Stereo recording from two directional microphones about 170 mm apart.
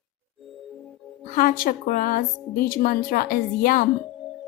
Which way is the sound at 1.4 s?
55° left (ahead or behind).